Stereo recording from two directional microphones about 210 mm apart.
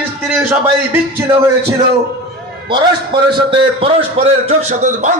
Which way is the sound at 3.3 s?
30° right (ahead or behind).